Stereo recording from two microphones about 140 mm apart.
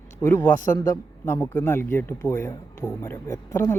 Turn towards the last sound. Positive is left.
turn(degrees=15)  # may be behind; listen again after turning